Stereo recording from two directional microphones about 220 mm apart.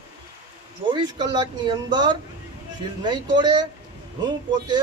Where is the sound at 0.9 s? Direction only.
20° right (ahead or behind).